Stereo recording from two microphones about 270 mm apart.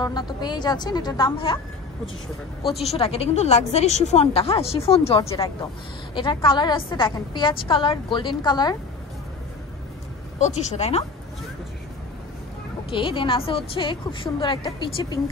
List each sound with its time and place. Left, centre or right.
0.0 s a woman's voice: centre
2.8 s a woman's voice: left
10.4 s a woman's voice: left
12.9 s a woman's voice: centre